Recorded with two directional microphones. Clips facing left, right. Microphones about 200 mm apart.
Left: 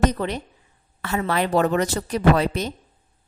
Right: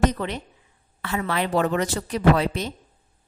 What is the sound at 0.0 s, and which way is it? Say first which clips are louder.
A woman's voice: left 1 dB; 40° left (ahead or behind).